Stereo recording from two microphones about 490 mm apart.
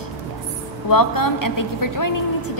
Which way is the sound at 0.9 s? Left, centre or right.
Left.